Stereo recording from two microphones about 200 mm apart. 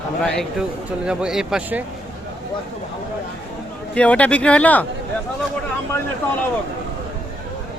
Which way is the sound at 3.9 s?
5° left (ahead or behind).